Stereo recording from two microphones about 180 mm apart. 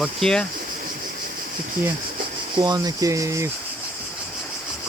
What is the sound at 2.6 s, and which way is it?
Speech, 20° right (ahead or behind).